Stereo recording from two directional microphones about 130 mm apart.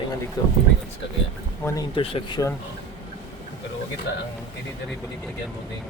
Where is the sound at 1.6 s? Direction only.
25° left (ahead or behind).